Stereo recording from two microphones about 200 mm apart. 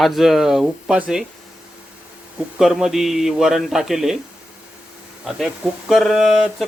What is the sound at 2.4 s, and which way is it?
Speech, centre (ahead or behind).